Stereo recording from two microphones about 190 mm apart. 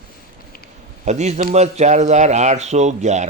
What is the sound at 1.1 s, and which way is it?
A man's voice, 35° right (ahead or behind).